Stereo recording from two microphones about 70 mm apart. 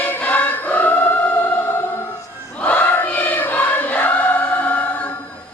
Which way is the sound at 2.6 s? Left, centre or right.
Centre.